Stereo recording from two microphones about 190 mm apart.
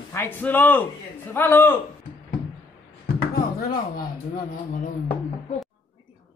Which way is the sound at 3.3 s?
50° left (ahead or behind).